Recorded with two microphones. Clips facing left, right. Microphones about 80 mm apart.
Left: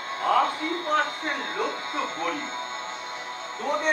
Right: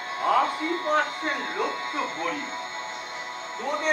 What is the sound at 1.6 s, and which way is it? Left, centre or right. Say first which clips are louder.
Speech: even; right.